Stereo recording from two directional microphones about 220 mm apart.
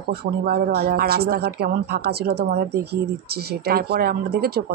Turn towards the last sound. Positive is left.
turn(degrees=-45)  # may be behind; listen again after turning